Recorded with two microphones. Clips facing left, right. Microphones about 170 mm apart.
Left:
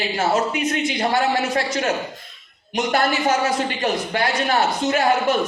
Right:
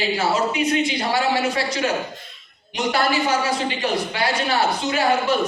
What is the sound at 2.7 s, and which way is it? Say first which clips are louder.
Speech: left 1 dB; 50° left (ahead or behind).